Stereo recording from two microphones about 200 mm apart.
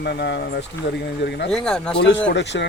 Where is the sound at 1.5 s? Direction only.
5° left (ahead or behind).